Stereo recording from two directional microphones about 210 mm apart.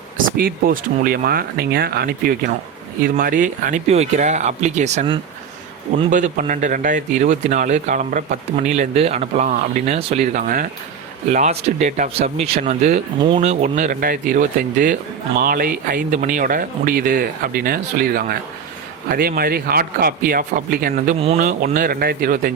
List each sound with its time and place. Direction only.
0.2 s speech: 45° right (ahead or behind)
21.2 s speech: 30° right (ahead or behind)
21.4 s speech: 45° right (ahead or behind)